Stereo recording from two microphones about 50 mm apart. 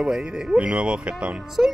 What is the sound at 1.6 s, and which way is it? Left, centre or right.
Speech, right.